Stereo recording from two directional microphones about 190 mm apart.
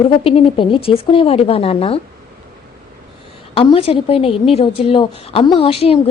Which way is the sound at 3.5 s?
30° left (ahead or behind).